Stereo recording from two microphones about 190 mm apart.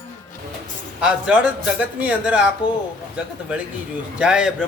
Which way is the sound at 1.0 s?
5° right (ahead or behind).